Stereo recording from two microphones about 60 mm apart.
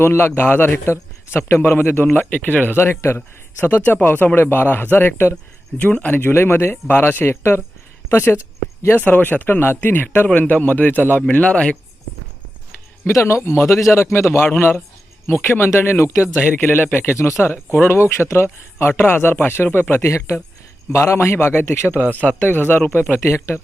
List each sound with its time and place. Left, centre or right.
0.0 s speech: left
0.9 s speech: left
2.7 s speech: left
5.8 s speech: left
6.1 s speech: left
9.0 s speech: left
11.3 s speech: left
13.1 s a man's voice: left
16.4 s speech: left
20.1 s a man's voice: left
22.4 s speech: left
23.1 s a man's voice: left